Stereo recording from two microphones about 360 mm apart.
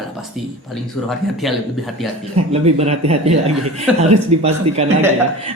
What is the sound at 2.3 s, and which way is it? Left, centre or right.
Speech, centre.